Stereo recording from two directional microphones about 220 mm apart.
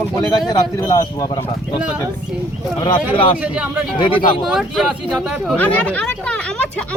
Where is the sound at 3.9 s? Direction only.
25° left (ahead or behind).